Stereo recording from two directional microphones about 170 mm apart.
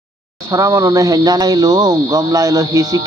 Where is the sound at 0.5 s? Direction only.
20° right (ahead or behind).